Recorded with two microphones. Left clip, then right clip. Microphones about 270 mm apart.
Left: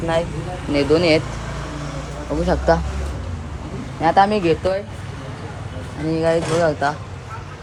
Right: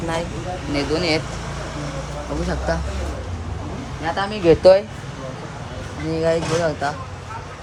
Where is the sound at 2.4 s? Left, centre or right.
Centre.